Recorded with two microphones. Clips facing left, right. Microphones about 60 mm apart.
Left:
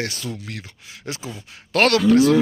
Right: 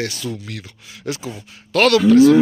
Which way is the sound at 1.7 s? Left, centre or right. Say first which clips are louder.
Right 3 dB; left.